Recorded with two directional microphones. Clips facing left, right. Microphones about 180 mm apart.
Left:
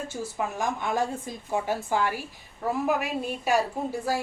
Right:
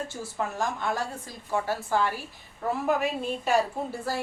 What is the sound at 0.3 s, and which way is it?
A woman's voice, 15° left (ahead or behind).